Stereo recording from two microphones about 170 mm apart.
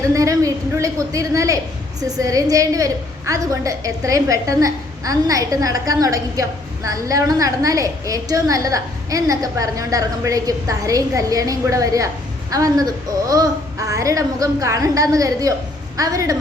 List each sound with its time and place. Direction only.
0.1 s a woman's voice: 20° right (ahead or behind)